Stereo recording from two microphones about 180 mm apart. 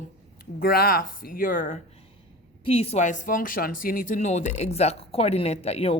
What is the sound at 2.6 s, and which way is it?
Speech, 35° left (ahead or behind).